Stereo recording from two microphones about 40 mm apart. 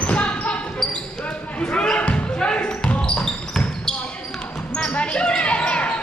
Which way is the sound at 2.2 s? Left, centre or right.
Left.